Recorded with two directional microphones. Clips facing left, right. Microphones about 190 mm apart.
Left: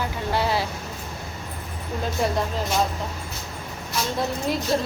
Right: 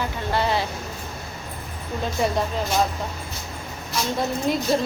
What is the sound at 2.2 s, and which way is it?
Speech, centre (ahead or behind).